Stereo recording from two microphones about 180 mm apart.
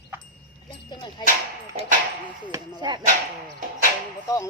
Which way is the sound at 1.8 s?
35° right (ahead or behind).